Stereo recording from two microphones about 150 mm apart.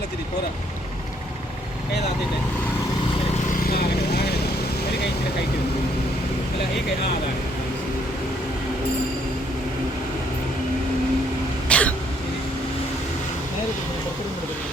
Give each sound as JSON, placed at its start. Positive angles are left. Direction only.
{"t": 3.6, "sound": "vehicle", "side_deg": 90}
{"t": 11.7, "sound": "throat clearing", "side_deg": 10}